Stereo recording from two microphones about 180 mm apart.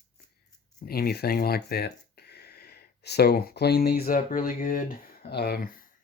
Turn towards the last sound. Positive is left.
turn(degrees=55)  # may be behind; listen again after turning